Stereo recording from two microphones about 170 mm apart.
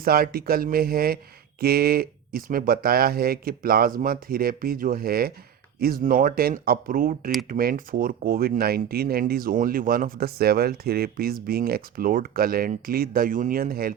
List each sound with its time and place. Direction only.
0.0 s speech: 60° right (ahead or behind)